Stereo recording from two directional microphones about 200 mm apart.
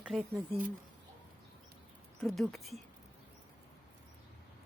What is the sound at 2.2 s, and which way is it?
Speech, centre (ahead or behind).